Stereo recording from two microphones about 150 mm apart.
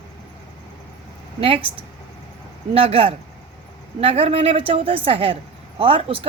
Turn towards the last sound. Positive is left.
turn(degrees=-35)  # may be behind; listen again after turning